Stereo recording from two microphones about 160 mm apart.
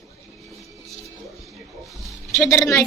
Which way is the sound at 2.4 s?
15° left (ahead or behind).